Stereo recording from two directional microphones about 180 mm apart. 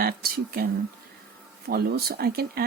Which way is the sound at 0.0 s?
55° right (ahead or behind).